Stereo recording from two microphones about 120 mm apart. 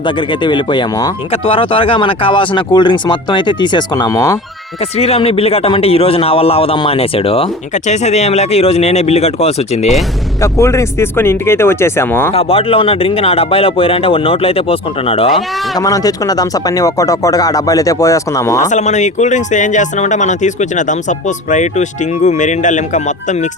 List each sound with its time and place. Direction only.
0.0 s speech: 40° left (ahead or behind)
1.3 s speech: 50° left (ahead or behind); by 4.4 s 30° left (ahead or behind)
4.8 s speech: 60° left (ahead or behind)
7.7 s speech: 75° left (ahead or behind)
10.4 s speech: 25° left (ahead or behind)
12.3 s speech: 55° left (ahead or behind)
15.3 s speech: centre (ahead or behind)
15.8 s speech: 30° left (ahead or behind)
18.6 s speech: 80° left